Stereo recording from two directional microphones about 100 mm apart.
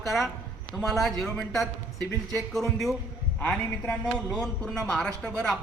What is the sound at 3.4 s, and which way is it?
Speech, 15° left (ahead or behind).